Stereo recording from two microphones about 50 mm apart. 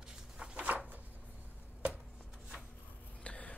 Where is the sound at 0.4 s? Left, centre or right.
Right.